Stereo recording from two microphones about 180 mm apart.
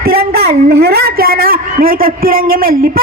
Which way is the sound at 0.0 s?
55° right (ahead or behind).